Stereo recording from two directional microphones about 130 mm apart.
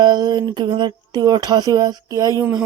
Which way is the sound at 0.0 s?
35° right (ahead or behind).